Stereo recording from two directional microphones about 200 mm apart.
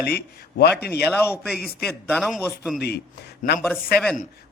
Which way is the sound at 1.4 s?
Centre (ahead or behind).